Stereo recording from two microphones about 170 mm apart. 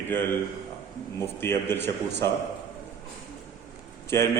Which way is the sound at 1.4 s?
15° left (ahead or behind).